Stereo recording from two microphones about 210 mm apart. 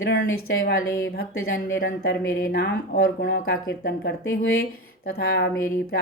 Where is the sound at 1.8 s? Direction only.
50° left (ahead or behind).